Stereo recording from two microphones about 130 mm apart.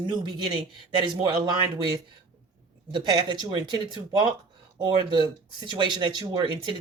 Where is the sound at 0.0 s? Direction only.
35° right (ahead or behind).